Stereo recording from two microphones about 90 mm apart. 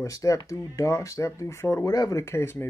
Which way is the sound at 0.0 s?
35° left (ahead or behind).